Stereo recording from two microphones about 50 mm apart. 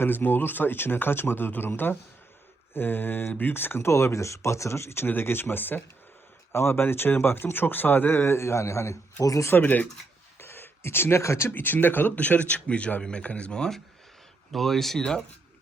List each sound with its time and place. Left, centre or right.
0.0 s speech: left
3.8 s speech: left
5.0 s speech: left
6.5 s speech: left
9.6 s speech: left
10.3 s a sound: left
11.2 s speech: left
11.6 s speech: left
14.5 s speech: centre